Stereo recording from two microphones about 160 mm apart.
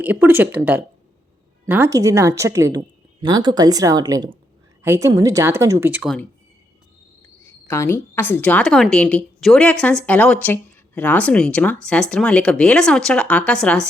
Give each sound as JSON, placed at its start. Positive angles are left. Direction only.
{"t": 0.0, "sound": "a woman's voice", "side_deg": -10}
{"t": 7.7, "sound": "a woman's voice", "side_deg": 15}